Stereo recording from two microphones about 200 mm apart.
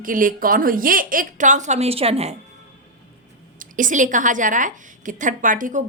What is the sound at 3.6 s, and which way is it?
A woman's voice, 40° right (ahead or behind).